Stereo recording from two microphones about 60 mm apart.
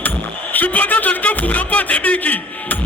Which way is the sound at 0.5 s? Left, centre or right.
Left.